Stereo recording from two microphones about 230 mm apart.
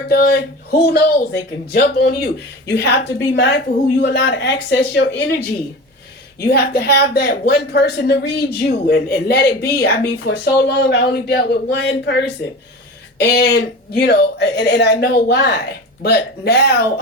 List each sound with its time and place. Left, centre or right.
0.1 s speech: left